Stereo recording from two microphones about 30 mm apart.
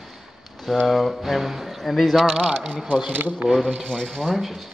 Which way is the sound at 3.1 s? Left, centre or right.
Right.